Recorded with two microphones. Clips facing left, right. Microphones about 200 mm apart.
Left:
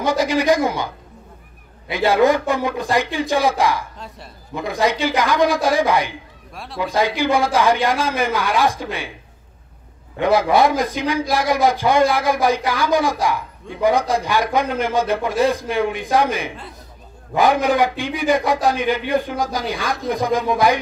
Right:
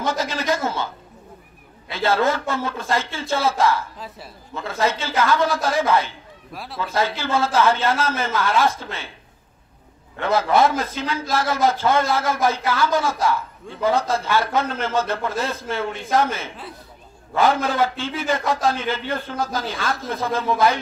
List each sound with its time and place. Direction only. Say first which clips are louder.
0.0 s a man's voice: left 6 dB; 15° left (ahead or behind)
1.9 s a man's voice: left 5 dB; 15° left (ahead or behind)
6.5 s a man's voice: even; centre (ahead or behind)
6.8 s a man's voice: left 5 dB; 15° left (ahead or behind)
10.1 s a man's voice: left 3 dB; 15° left (ahead or behind)